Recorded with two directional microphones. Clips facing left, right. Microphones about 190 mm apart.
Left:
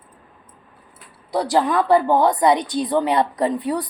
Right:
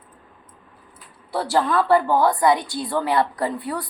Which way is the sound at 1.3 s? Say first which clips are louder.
Left 2 dB; 15° left (ahead or behind).